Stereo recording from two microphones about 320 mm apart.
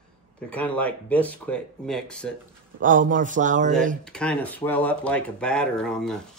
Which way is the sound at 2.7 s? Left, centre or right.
Right.